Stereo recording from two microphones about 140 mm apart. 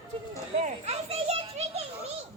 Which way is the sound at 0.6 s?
50° right (ahead or behind).